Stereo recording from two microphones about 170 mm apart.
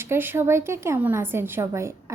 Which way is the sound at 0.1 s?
15° right (ahead or behind).